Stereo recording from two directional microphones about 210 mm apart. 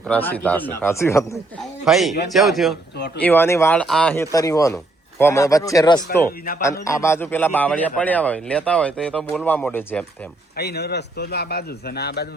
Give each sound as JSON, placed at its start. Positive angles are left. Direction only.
{"t": 0.1, "sound": "a man's voice", "side_deg": 10}
{"t": 1.8, "sound": "a man's voice", "side_deg": 0}
{"t": 10.6, "sound": "a man's voice", "side_deg": 50}